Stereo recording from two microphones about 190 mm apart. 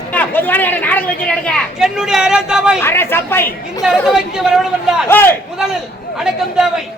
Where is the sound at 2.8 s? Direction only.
10° left (ahead or behind).